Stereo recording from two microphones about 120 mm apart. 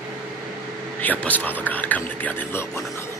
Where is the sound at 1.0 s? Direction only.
15° left (ahead or behind).